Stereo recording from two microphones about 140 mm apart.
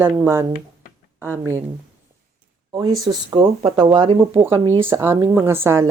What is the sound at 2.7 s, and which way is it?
Speech, 25° right (ahead or behind).